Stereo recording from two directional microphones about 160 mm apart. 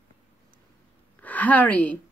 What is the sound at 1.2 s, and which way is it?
Speech, 10° left (ahead or behind).